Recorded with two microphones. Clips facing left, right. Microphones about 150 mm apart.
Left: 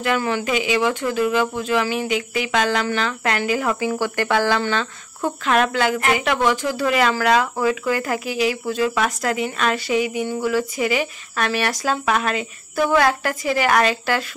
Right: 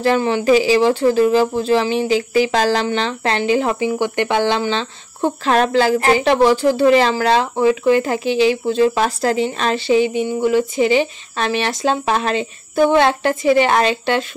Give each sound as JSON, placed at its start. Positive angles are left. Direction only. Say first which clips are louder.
{"t": 0.0, "sound": "speech", "louder": "right 5 dB", "side_deg": -30}